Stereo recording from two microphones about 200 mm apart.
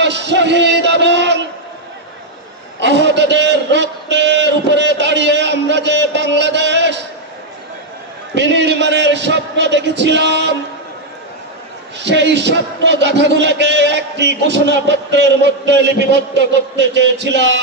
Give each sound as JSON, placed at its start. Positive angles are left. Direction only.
{"t": 0.0, "sound": "music", "side_deg": -60}
{"t": 2.8, "sound": "a man's voice", "side_deg": -60}
{"t": 8.4, "sound": "a man's voice", "side_deg": -60}
{"t": 12.0, "sound": "a man's voice", "side_deg": -60}